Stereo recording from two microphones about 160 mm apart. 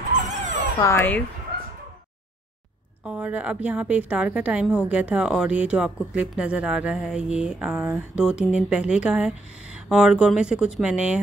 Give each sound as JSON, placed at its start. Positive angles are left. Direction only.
{"t": 0.1, "sound": "dog", "side_deg": -50}
{"t": 0.7, "sound": "speech", "side_deg": 15}
{"t": 3.1, "sound": "a woman's voice", "side_deg": -10}